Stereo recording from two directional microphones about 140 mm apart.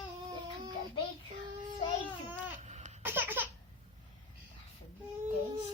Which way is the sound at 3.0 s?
15° right (ahead or behind).